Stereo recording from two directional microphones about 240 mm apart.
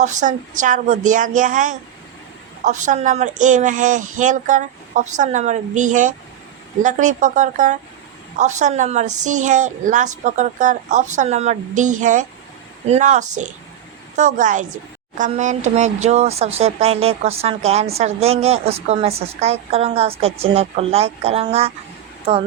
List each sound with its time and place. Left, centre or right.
0.0 s a woman's voice: right